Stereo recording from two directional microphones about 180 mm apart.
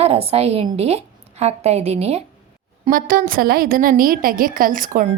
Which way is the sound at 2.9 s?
50° right (ahead or behind).